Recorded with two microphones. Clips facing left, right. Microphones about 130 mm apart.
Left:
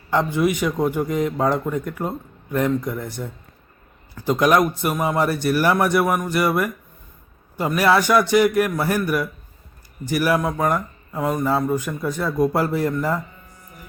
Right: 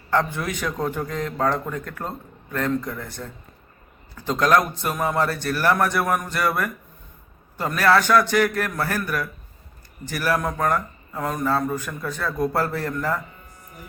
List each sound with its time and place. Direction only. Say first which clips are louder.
0.1 s a man's voice: left 4 dB; 10° left (ahead or behind)